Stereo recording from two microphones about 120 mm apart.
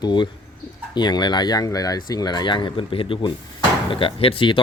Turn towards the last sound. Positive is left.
turn(degrees=45)  # may be behind; listen again after turning